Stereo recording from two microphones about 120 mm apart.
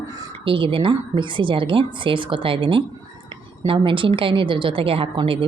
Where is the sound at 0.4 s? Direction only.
45° right (ahead or behind).